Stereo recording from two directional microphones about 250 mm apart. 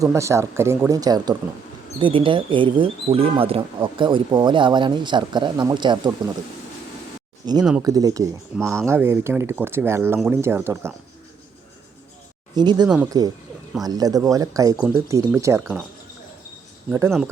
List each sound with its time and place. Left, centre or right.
0.0 s speech: centre
7.4 s speech: centre
12.5 s speech: centre